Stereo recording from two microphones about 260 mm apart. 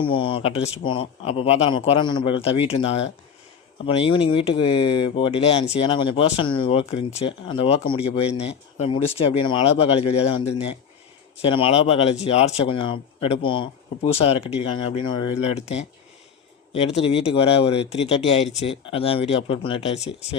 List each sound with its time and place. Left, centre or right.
0.0 s speech: centre